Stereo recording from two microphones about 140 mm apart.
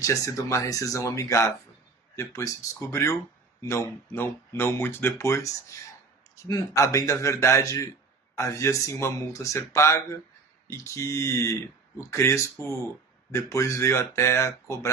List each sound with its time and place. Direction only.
0.0 s speech: 20° left (ahead or behind)